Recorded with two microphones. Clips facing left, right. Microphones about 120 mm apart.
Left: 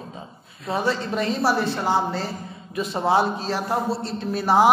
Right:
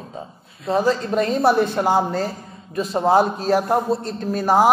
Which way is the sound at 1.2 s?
50° right (ahead or behind).